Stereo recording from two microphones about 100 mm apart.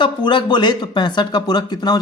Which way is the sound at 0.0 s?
55° left (ahead or behind).